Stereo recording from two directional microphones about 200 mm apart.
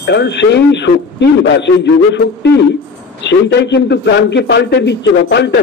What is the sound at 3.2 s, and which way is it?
A man's voice, 60° left (ahead or behind).